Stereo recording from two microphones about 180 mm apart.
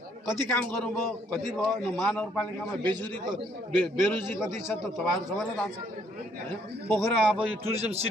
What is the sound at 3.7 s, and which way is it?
Speech, 10° left (ahead or behind).